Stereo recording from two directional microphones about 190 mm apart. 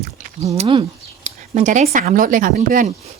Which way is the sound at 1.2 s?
40° right (ahead or behind).